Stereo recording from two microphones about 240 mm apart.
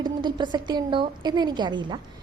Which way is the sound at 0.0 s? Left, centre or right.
Centre.